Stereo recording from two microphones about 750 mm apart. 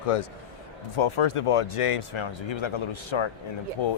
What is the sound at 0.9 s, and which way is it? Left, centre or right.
Speech, left.